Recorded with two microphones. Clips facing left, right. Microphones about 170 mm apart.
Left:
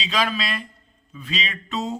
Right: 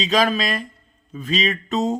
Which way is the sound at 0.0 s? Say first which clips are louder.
Right 6 dB; 40° right (ahead or behind).